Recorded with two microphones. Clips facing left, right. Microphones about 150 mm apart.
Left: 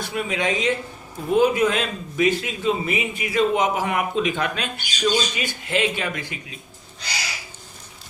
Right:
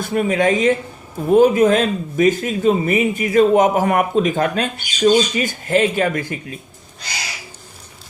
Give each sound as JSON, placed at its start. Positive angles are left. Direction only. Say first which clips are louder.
{"t": 0.0, "sound": "speech", "louder": "right 8 dB", "side_deg": -45}